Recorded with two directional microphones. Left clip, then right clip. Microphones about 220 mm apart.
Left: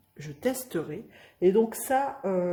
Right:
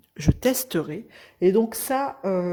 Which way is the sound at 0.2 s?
45° right (ahead or behind).